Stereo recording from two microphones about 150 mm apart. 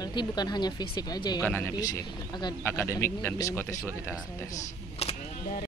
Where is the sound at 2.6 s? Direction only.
15° left (ahead or behind).